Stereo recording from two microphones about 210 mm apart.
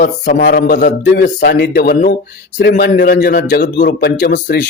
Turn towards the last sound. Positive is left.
turn(degrees=55)  # may be behind; listen again after turning